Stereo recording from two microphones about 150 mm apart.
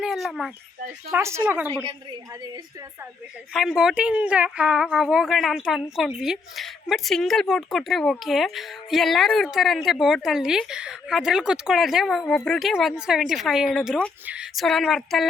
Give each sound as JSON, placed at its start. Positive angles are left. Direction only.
{"t": 0.0, "sound": "speech", "side_deg": 0}
{"t": 1.1, "sound": "speech", "side_deg": -15}
{"t": 1.9, "sound": "a woman's voice", "side_deg": -30}
{"t": 3.5, "sound": "speech", "side_deg": -5}